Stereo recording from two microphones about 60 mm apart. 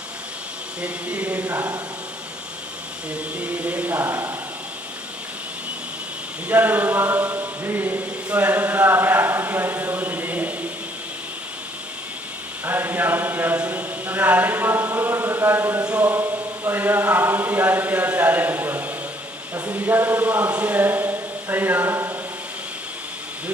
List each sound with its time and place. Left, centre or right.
0.8 s speech: right
3.3 s speech: right
6.5 s a sound: right
12.6 s speech: right
15.2 s chant: right
15.9 s music: right
16.1 s chant: right
19.6 s speech: right